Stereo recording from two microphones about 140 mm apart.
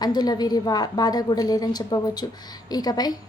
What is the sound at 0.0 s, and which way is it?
A woman's voice, 30° left (ahead or behind).